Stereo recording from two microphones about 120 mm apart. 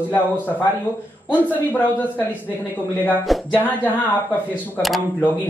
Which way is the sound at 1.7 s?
15° left (ahead or behind).